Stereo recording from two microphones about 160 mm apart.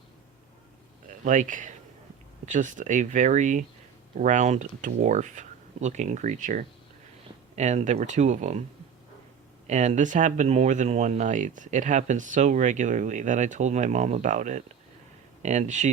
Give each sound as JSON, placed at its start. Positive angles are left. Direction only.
{"t": 1.0, "sound": "speech", "side_deg": -50}
{"t": 9.6, "sound": "speech", "side_deg": -45}